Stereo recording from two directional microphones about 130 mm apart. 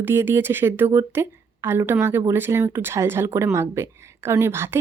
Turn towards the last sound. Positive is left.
turn(degrees=-20)  # may be behind; listen again after turning